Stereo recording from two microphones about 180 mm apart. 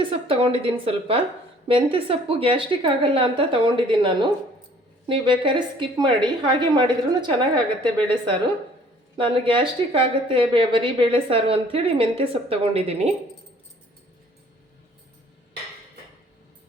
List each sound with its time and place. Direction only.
0.0 s a woman's voice: 30° right (ahead or behind)
9.1 s speech: 30° right (ahead or behind)